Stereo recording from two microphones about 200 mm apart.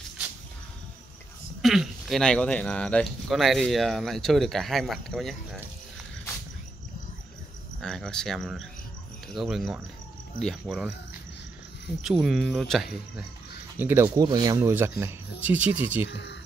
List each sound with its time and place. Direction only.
1.6 s speech: centre (ahead or behind)
7.8 s speech: centre (ahead or behind)
12.0 s speech: centre (ahead or behind)
13.7 s speech: 10° right (ahead or behind)
16.1 s speech: 55° left (ahead or behind)